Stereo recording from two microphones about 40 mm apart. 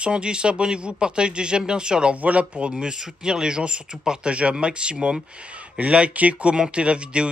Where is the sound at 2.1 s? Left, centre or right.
Right.